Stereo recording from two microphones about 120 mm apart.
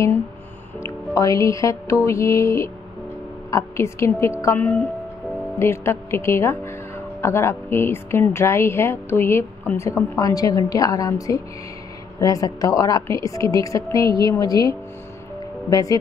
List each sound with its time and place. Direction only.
0.8 s a woman's voice: 30° left (ahead or behind)